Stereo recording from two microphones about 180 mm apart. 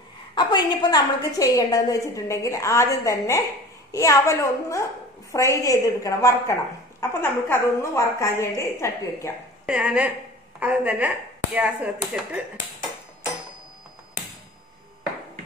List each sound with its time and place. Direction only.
0.3 s a woman's voice: 25° left (ahead or behind)
9.7 s speech: 5° right (ahead or behind)